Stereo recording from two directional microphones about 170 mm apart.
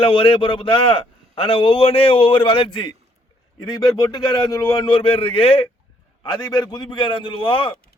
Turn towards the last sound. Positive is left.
turn(degrees=30)  # may be behind; listen again after turning